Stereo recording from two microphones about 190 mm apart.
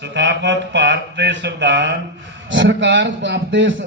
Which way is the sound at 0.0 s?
70° right (ahead or behind).